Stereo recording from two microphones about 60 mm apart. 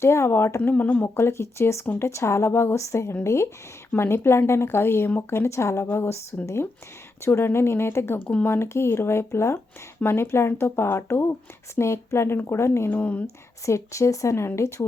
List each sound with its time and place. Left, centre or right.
0.0 s speech: left
0.6 s speech: left
1.1 s speech: left
12.9 s speech: left
13.2 s speech: left